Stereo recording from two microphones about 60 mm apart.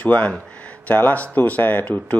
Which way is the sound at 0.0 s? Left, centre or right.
Left.